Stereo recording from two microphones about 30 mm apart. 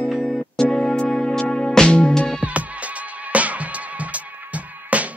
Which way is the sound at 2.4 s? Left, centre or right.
Right.